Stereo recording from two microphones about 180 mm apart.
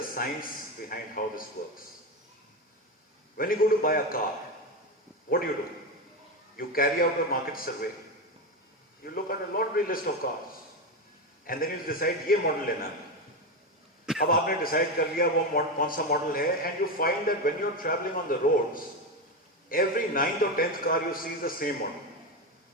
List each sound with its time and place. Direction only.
0.2 s a man's voice: 55° left (ahead or behind)
3.3 s a man's voice: 55° left (ahead or behind)
6.6 s a man's voice: 55° left (ahead or behind)
9.0 s a man's voice: 55° left (ahead or behind)
11.4 s a man's voice: 55° left (ahead or behind)
14.2 s a man's voice: 55° left (ahead or behind)